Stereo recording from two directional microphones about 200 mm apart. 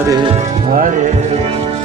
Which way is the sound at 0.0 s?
20° right (ahead or behind).